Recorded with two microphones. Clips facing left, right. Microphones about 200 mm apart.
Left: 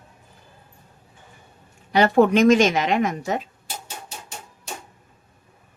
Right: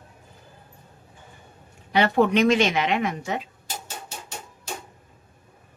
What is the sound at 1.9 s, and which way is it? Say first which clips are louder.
Speech: left 3 dB; 40° left (ahead or behind).